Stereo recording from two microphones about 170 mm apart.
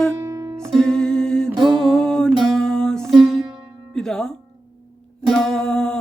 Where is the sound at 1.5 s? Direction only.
25° right (ahead or behind).